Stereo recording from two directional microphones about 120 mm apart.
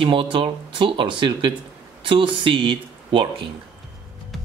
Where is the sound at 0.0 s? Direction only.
45° right (ahead or behind).